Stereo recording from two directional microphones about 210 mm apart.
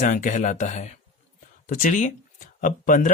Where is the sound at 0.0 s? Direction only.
40° left (ahead or behind).